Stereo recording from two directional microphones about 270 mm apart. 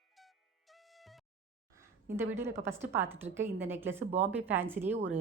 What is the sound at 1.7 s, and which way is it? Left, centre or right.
A woman's voice, centre.